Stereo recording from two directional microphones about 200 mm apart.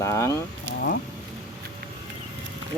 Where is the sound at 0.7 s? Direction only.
70° right (ahead or behind).